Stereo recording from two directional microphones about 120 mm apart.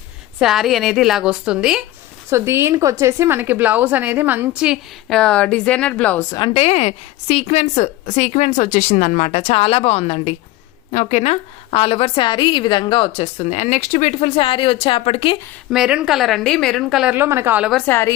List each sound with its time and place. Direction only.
0.3 s a woman's voice: centre (ahead or behind)
2.3 s a woman's voice: 20° right (ahead or behind)
5.0 s a woman's voice: 5° left (ahead or behind)
6.5 s a woman's voice: 60° left (ahead or behind)
10.9 s a woman's voice: 70° left (ahead or behind); by 15.4 s 50° left (ahead or behind)
15.7 s a woman's voice: 5° right (ahead or behind)
17.2 s a woman's voice: 20° right (ahead or behind)
17.8 s speech: 20° left (ahead or behind)